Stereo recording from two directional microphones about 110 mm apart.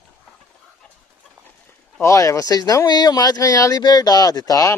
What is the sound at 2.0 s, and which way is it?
Speech, 25° left (ahead or behind).